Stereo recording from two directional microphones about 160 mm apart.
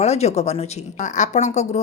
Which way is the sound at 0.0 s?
40° left (ahead or behind).